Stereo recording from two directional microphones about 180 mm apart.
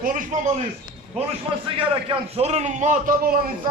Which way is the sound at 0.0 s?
50° right (ahead or behind).